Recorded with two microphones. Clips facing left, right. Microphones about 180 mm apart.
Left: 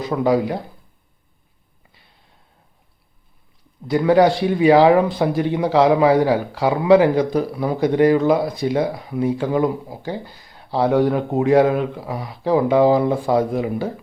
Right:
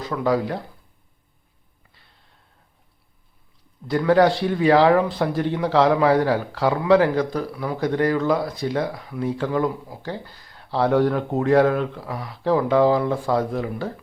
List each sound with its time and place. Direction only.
0.0 s speech: 20° left (ahead or behind)
3.8 s speech: 15° left (ahead or behind)